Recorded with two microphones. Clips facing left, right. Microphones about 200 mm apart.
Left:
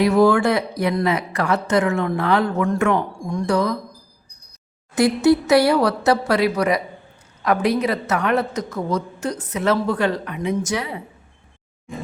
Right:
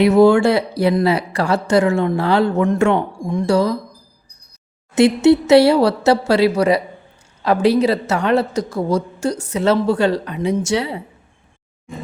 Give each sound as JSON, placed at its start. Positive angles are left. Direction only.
{"t": 0.0, "sound": "speech", "side_deg": -25}
{"t": 4.9, "sound": "speech", "side_deg": -25}